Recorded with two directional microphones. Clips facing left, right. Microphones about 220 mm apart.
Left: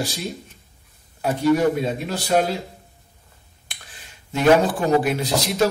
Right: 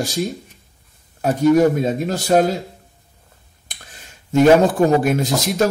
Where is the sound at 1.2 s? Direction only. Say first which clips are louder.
Right 4 dB; 45° right (ahead or behind).